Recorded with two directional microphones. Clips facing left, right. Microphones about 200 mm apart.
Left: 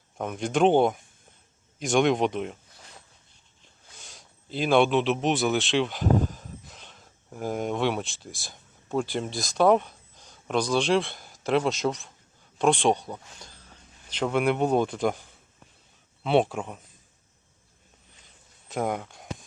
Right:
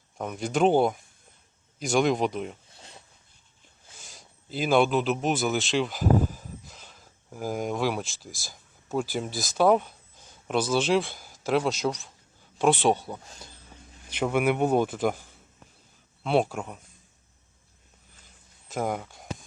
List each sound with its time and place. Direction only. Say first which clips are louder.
0.2 s speech: left 1 dB; centre (ahead or behind)
2.7 s a sound: right 1 dB; 25° right (ahead or behind)
4.0 s a man's voice: even; centre (ahead or behind)
16.2 s speech: left 2 dB; centre (ahead or behind)
18.7 s speech: left 1 dB; centre (ahead or behind)